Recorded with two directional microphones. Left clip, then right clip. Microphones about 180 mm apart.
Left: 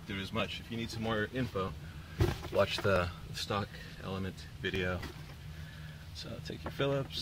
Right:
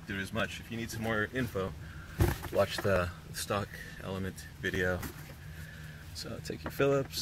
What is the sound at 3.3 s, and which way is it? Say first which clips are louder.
Speech: right 2 dB; 25° right (ahead or behind).